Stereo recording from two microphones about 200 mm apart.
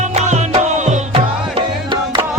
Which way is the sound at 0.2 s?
35° right (ahead or behind).